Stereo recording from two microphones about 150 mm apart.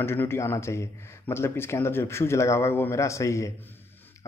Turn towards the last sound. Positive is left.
turn(degrees=20)  # may be behind; listen again after turning